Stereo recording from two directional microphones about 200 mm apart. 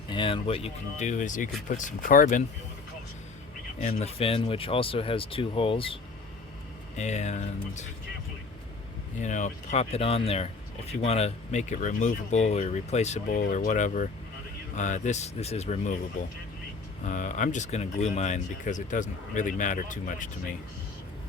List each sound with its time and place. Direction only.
0.1 s speech: 25° left (ahead or behind); by 2.4 s 45° left (ahead or behind)
3.8 s speech: 35° left (ahead or behind)
9.2 s speech: 35° left (ahead or behind)
17.1 s speech: 40° left (ahead or behind)